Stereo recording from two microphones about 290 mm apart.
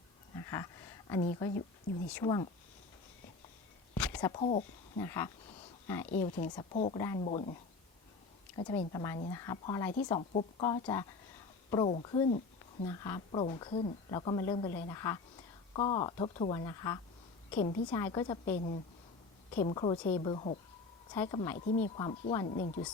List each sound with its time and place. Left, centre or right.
0.3 s a sound: centre
2.1 s speech: centre
3.9 s a sound: centre
4.3 s speech: left
5.0 s speech: centre
6.1 s speech: left
21.5 s speech: left